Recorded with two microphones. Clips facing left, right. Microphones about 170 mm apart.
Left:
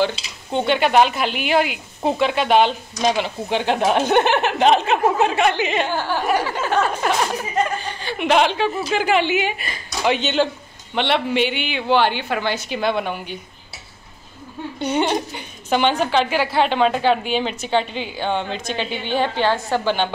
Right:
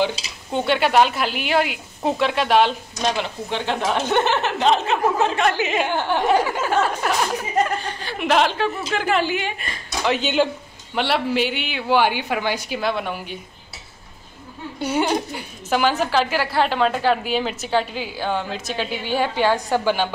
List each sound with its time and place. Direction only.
0.0 s a woman's voice: 5° right (ahead or behind)
3.4 s speech: 15° left (ahead or behind)
5.5 s a woman's voice: 5° right (ahead or behind)
5.9 s speech: 20° right (ahead or behind)
7.0 s a woman's voice: centre (ahead or behind)
14.8 s a woman's voice: 5° right (ahead or behind)